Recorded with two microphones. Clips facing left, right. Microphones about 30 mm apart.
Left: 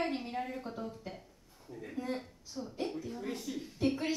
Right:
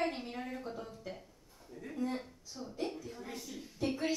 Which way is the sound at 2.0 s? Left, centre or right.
Left.